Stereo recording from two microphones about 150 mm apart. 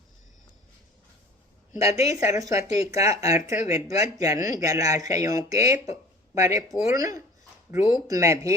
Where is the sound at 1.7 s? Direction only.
20° right (ahead or behind).